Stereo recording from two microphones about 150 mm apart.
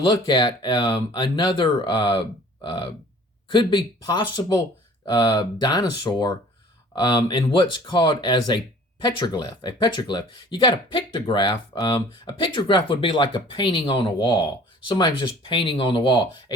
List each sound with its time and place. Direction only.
0.1 s speech: 30° left (ahead or behind)
3.5 s speech: 30° left (ahead or behind)